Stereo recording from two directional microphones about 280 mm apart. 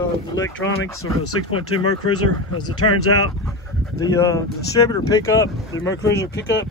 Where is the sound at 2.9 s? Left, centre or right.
Left.